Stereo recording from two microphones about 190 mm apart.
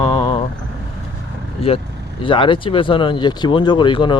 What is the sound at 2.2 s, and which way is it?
Speech, 25° left (ahead or behind).